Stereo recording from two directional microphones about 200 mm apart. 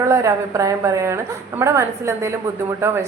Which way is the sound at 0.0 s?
15° right (ahead or behind).